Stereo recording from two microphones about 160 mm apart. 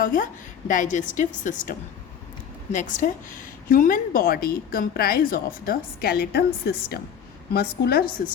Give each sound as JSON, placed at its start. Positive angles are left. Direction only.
{"t": 0.0, "sound": "a woman's voice", "side_deg": 55}
{"t": 2.7, "sound": "a woman's voice", "side_deg": 50}